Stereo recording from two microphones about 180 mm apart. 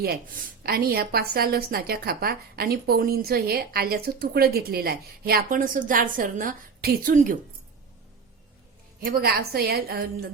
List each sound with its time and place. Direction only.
0.0 s a woman's voice: 60° right (ahead or behind)
9.0 s a woman's voice: 55° right (ahead or behind)